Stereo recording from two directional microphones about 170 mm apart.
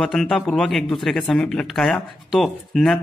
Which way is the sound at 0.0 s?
5° left (ahead or behind).